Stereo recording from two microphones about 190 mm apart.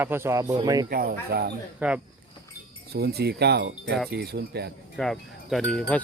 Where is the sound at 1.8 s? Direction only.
5° right (ahead or behind).